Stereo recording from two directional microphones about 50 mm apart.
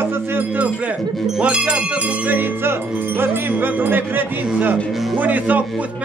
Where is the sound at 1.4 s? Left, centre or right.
Right.